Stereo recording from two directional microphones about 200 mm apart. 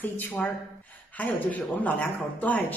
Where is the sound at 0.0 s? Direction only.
10° left (ahead or behind).